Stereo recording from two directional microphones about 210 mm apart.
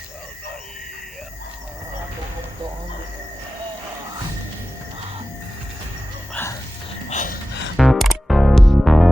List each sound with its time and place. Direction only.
6.3 s music: 10° left (ahead or behind)
7.1 s a sound: 35° left (ahead or behind)
7.8 s music: centre (ahead or behind)